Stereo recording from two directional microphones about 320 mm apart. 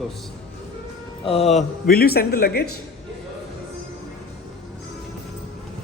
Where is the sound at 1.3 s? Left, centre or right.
Centre.